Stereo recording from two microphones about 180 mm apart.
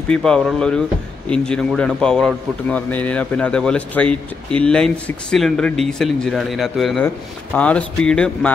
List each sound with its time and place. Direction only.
0.1 s speech: 5° left (ahead or behind)